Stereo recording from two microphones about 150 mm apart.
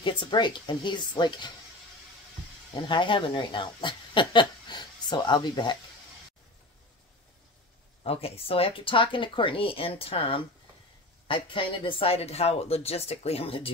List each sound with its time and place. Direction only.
0.0 s speech: 30° left (ahead or behind)
2.9 s speech: 35° left (ahead or behind)
8.0 s speech: 40° left (ahead or behind)